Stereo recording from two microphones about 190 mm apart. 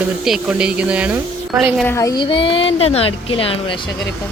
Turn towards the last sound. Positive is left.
turn(degrees=30)  # may be behind; listen again after turning